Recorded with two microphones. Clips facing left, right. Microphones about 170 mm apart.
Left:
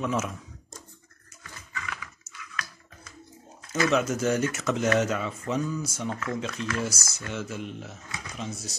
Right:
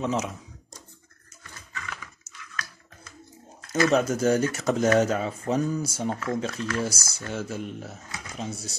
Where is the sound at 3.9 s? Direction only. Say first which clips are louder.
Right 2 dB; 35° right (ahead or behind).